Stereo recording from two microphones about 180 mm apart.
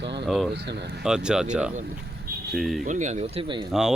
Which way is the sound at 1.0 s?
5° right (ahead or behind).